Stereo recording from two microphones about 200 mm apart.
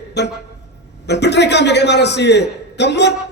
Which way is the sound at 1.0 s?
60° left (ahead or behind).